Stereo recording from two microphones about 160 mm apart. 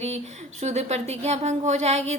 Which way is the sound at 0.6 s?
45° right (ahead or behind).